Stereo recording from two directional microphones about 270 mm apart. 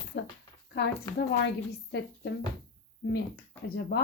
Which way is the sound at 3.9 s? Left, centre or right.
Left.